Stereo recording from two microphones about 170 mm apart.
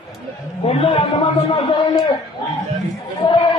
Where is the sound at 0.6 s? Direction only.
30° left (ahead or behind).